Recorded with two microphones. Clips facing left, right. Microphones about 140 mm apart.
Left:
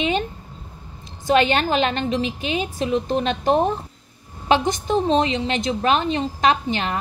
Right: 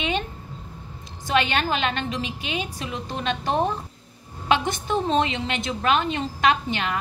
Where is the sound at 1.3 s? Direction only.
40° left (ahead or behind).